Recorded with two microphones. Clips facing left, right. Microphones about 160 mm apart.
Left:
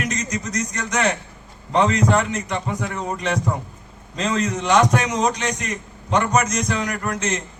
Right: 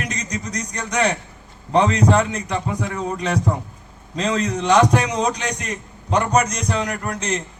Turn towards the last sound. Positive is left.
turn(degrees=-35)  # may be behind; listen again after turning